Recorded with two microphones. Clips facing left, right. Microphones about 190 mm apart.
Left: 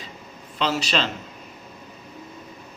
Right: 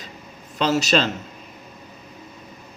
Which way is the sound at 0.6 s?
45° right (ahead or behind).